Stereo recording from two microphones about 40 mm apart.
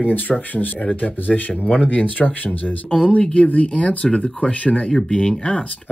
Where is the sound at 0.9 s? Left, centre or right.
Left.